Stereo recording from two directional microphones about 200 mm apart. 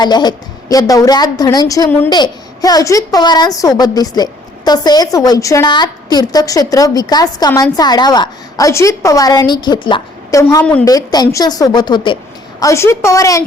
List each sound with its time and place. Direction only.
0.0 s a woman's voice: 20° left (ahead or behind)
10.8 s a woman's voice: 20° left (ahead or behind)